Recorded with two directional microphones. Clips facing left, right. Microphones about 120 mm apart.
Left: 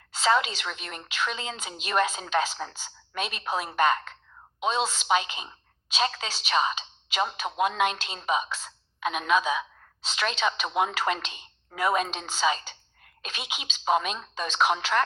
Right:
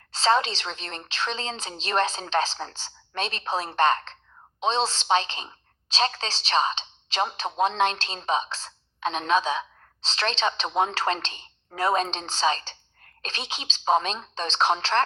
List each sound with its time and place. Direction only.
0.1 s a woman's voice: 30° right (ahead or behind)